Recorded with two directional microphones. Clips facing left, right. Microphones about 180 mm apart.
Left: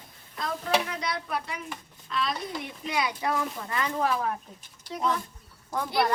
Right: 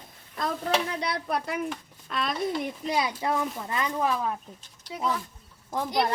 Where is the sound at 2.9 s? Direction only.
30° right (ahead or behind).